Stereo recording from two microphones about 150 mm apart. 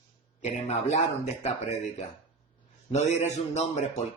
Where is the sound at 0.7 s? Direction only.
50° left (ahead or behind).